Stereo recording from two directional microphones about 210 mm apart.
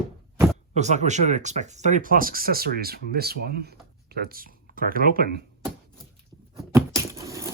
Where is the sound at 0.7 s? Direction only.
35° right (ahead or behind).